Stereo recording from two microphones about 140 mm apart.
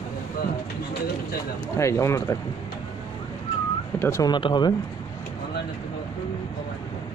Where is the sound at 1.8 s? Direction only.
20° left (ahead or behind).